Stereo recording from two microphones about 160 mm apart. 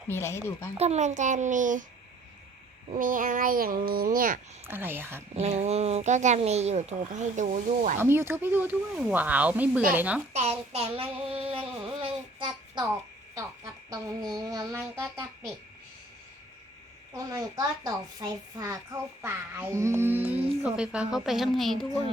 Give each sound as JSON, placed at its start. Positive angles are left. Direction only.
{"t": 0.1, "sound": "speech", "side_deg": 15}
{"t": 0.8, "sound": "speech", "side_deg": -45}
{"t": 2.9, "sound": "speech", "side_deg": -55}
{"t": 4.6, "sound": "speech", "side_deg": -15}
{"t": 5.3, "sound": "speech", "side_deg": -40}
{"t": 7.9, "sound": "speech", "side_deg": -15}
{"t": 10.3, "sound": "child singing", "side_deg": -40}
{"t": 13.9, "sound": "a woman's voice", "side_deg": -25}
{"t": 17.2, "sound": "a woman's voice", "side_deg": -20}